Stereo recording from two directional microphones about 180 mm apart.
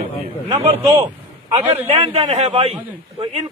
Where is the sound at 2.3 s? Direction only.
35° right (ahead or behind).